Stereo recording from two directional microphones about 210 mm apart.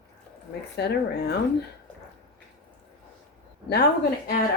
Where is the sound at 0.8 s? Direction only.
50° left (ahead or behind).